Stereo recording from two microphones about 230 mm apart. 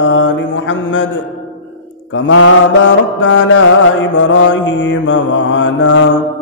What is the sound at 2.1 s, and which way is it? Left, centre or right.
Mantra, left.